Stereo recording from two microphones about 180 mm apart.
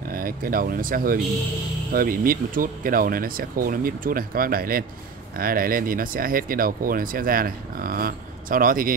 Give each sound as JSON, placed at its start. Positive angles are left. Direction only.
{"t": 0.1, "sound": "speech", "side_deg": -50}